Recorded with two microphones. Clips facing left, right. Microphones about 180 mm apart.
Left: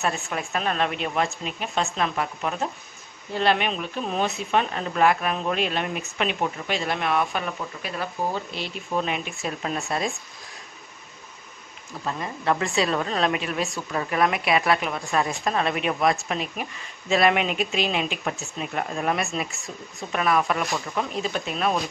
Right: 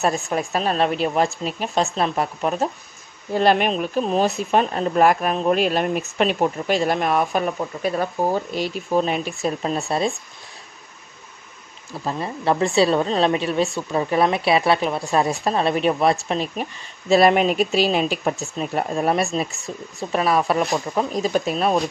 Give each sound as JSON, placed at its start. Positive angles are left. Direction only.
{"t": 0.0, "sound": "speech", "side_deg": -40}
{"t": 12.0, "sound": "speech", "side_deg": -30}